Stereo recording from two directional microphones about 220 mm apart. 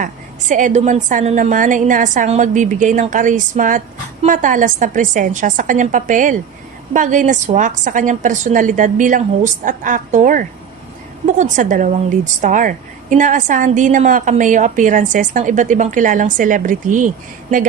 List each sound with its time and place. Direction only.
0.0 s a woman's voice: 35° right (ahead or behind)
11.5 s a woman's voice: 35° right (ahead or behind)